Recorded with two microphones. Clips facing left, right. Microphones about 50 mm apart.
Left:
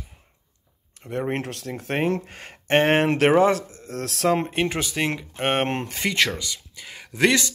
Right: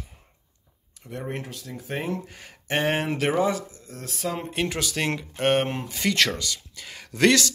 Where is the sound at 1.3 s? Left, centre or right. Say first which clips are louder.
Left 6 dB; left.